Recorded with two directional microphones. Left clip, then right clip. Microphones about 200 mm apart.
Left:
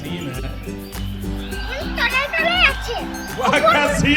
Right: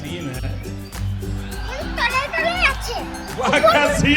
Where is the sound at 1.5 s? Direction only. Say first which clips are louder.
Left 2 dB; centre (ahead or behind).